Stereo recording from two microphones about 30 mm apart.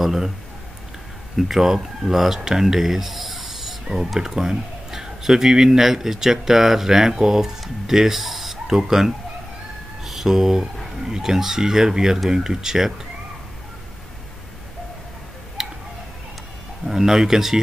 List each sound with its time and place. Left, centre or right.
0.0 s speech: centre
1.3 s a man's voice: centre
7.6 s a sound: centre
8.6 s a man's voice: centre
10.2 s a man's voice: centre
15.6 s tick-tock: centre
16.8 s speech: centre